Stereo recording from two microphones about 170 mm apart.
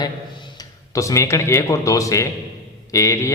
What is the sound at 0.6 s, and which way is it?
Speech, 20° left (ahead or behind).